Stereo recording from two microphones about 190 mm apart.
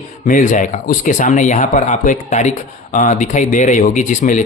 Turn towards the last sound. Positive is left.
turn(degrees=40)  # may be behind; listen again after turning